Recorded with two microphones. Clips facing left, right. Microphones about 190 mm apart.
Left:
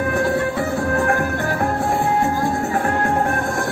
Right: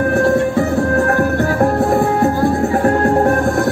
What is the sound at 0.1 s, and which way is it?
Music, 40° right (ahead or behind).